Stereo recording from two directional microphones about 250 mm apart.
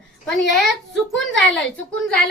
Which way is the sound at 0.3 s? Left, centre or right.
Centre.